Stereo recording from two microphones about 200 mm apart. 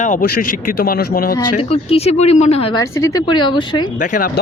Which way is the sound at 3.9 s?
40° left (ahead or behind).